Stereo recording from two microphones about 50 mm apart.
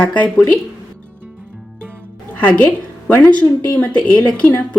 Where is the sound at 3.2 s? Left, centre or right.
Left.